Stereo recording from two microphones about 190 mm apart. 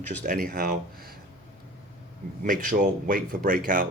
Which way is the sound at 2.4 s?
45° right (ahead or behind).